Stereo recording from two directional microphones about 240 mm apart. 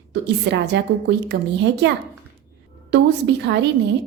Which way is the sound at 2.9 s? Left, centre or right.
Right.